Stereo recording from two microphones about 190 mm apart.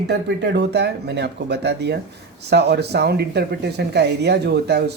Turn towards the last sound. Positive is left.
turn(degrees=-60)  # may be behind; listen again after turning